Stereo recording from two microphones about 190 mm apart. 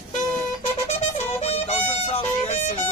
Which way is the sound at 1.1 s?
35° left (ahead or behind).